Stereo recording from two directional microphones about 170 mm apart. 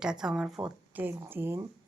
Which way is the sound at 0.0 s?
5° right (ahead or behind).